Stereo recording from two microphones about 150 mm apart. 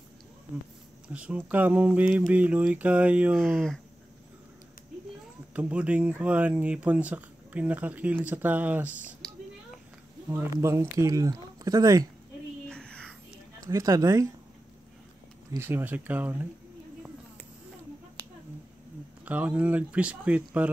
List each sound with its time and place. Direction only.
1.0 s speech: 10° right (ahead or behind)
3.3 s speech: centre (ahead or behind)
5.5 s speech: 10° right (ahead or behind)
10.2 s speech: 20° right (ahead or behind)
12.6 s a sound: 5° left (ahead or behind)
13.7 s speech: 25° right (ahead or behind)
15.5 s speech: 15° right (ahead or behind)
19.2 s speech: 10° right (ahead or behind)